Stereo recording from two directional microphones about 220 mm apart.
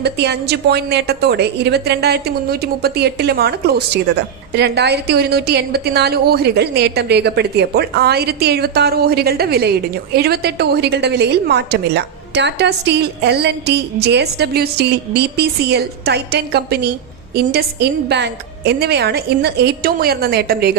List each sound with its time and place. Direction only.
0.0 s a woman's voice: 50° right (ahead or behind)